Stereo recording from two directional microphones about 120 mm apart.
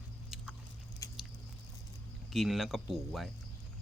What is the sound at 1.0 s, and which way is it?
Biting, 30° left (ahead or behind).